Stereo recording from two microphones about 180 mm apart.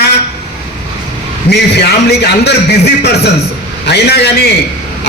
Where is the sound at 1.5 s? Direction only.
65° left (ahead or behind).